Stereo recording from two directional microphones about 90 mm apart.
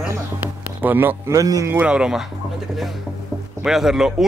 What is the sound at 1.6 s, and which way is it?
Speech, 15° right (ahead or behind).